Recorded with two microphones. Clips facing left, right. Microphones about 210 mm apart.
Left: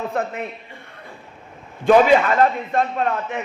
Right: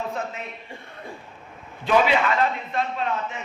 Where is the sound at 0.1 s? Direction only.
60° left (ahead or behind).